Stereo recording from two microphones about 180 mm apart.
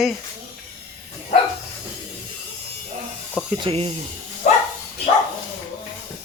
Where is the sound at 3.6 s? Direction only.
35° right (ahead or behind).